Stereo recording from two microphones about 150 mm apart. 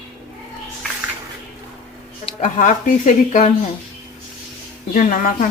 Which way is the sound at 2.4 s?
55° left (ahead or behind).